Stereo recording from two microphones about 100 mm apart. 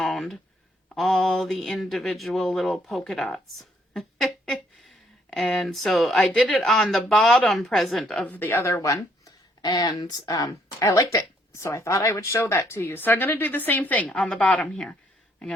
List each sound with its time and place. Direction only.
0.0 s a sound: 5° left (ahead or behind)
0.9 s speech: 5° left (ahead or behind)
8.3 s speech: 20° left (ahead or behind)